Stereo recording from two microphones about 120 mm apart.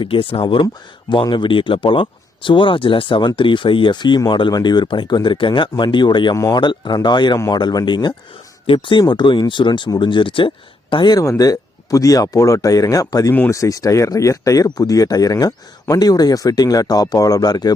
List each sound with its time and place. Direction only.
0.0 s speech: 50° left (ahead or behind)
0.4 s speech: 40° left (ahead or behind)
6.3 s speech: 25° left (ahead or behind)
6.6 s speech: 40° left (ahead or behind)
7.3 s speech: 25° left (ahead or behind)